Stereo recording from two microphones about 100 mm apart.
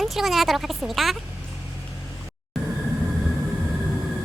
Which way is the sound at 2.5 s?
Centre (ahead or behind).